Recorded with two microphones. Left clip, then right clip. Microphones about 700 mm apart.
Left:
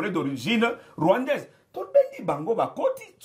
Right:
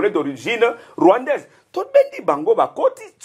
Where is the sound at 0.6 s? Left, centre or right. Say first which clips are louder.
Right 11 dB; right.